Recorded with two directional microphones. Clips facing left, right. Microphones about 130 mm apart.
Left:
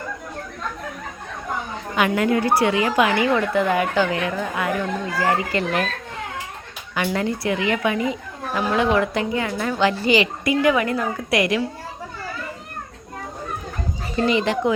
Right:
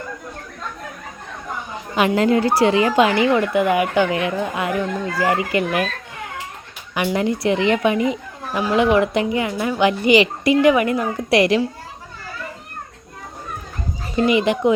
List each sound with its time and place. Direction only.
1.7 s a woman's voice: 20° right (ahead or behind)
6.9 s a woman's voice: 15° right (ahead or behind)
14.3 s a child's voice: 15° right (ahead or behind)